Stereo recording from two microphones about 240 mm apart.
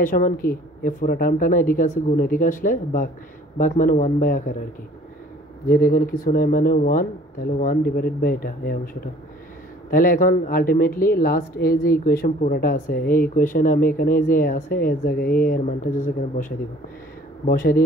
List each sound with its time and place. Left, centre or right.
0.0 s speech: left
5.7 s speech: left